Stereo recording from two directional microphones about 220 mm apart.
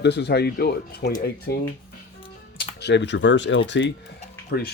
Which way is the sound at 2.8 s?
50° left (ahead or behind).